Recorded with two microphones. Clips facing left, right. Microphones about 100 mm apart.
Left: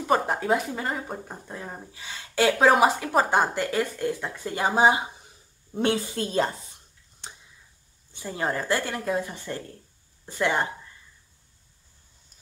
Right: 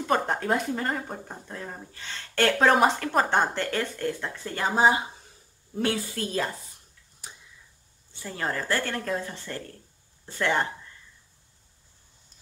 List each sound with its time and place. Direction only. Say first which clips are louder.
0.0 s a woman's voice: left 2 dB; 5° left (ahead or behind); by 6.5 s 25° left (ahead or behind)
8.1 s speech: left 3 dB; 20° left (ahead or behind)